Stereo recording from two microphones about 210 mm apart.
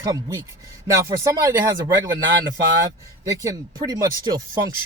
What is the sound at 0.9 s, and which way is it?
Speech, 15° right (ahead or behind).